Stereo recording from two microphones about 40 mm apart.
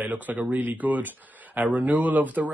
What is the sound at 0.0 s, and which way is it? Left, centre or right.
Speech, right.